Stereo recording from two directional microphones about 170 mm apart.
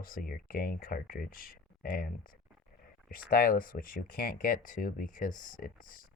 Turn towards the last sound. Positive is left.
turn(degrees=55)  # may be behind; listen again after turning